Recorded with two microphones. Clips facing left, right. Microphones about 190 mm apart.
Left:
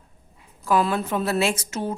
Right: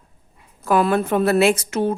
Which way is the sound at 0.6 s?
55° right (ahead or behind).